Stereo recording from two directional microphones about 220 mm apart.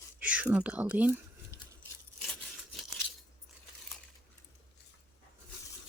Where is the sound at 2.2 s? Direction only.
Centre (ahead or behind).